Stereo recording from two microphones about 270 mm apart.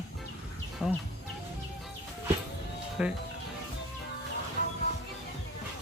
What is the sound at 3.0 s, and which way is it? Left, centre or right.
Speech, centre.